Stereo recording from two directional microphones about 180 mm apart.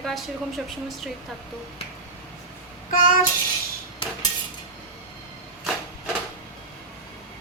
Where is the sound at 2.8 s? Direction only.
50° left (ahead or behind).